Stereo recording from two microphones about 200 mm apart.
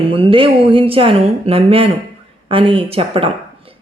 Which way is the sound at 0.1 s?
25° right (ahead or behind).